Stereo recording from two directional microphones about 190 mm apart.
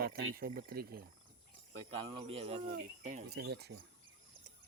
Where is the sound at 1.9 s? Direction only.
30° right (ahead or behind).